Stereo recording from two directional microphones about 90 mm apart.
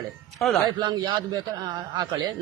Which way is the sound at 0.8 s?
55° right (ahead or behind).